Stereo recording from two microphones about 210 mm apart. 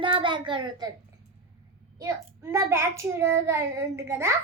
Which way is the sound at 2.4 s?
15° right (ahead or behind).